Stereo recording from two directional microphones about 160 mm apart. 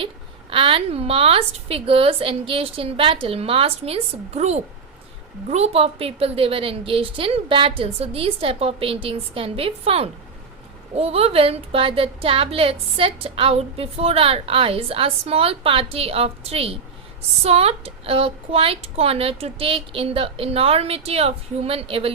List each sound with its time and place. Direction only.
0.5 s a woman's voice: 35° right (ahead or behind)